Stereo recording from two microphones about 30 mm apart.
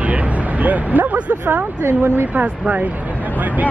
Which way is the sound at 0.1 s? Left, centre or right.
Right.